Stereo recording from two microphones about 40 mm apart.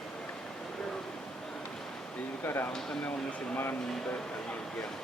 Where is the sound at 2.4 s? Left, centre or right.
Left.